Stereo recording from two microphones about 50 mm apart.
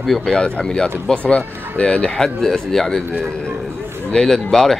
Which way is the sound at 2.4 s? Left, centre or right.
Centre.